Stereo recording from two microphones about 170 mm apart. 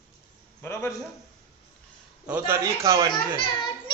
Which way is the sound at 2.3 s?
15° right (ahead or behind).